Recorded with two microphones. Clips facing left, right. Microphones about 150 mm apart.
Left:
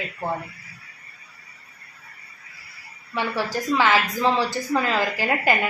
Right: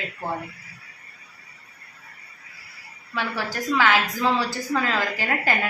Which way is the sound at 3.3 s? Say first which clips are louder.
Left 2 dB; 25° left (ahead or behind).